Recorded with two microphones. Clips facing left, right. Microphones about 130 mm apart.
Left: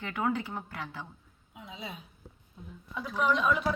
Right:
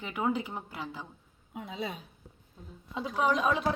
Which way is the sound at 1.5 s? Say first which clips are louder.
Right 6 dB; 55° right (ahead or behind).